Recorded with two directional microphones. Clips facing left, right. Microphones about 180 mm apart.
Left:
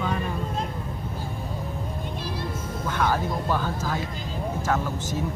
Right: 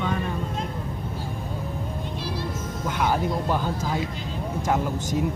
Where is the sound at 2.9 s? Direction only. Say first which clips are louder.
Right 1 dB; 15° right (ahead or behind).